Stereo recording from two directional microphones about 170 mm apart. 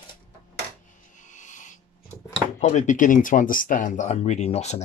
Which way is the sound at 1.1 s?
45° left (ahead or behind).